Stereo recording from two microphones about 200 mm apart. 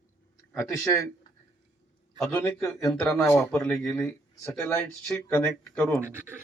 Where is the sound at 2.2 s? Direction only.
15° left (ahead or behind).